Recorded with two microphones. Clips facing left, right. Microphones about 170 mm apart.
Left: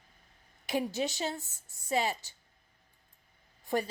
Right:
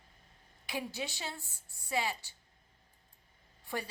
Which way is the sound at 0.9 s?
40° left (ahead or behind).